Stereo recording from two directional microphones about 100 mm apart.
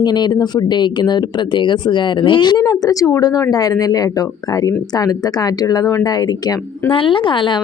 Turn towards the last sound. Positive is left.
turn(degrees=55)  # may be behind; listen again after turning